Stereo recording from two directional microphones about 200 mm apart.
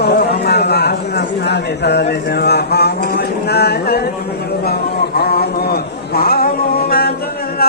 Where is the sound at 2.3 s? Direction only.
55° left (ahead or behind).